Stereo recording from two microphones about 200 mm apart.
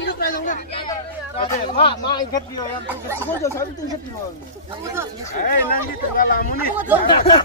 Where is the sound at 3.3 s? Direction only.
15° left (ahead or behind).